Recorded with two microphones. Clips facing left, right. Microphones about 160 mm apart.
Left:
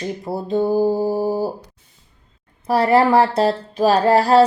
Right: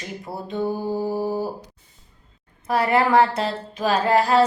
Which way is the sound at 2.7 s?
35° left (ahead or behind).